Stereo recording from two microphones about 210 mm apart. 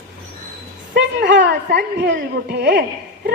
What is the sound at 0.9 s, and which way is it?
A woman's voice, 55° right (ahead or behind).